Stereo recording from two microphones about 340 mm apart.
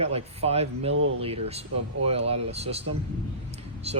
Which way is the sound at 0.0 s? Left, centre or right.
Centre.